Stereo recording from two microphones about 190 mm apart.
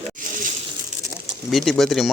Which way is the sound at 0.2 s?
45° right (ahead or behind).